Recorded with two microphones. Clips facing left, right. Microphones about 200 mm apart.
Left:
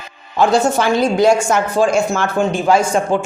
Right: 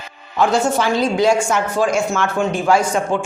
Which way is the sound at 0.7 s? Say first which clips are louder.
Left 2 dB; 55° left (ahead or behind).